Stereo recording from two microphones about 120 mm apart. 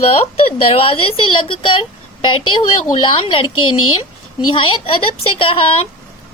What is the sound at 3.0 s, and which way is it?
Speech, 45° left (ahead or behind).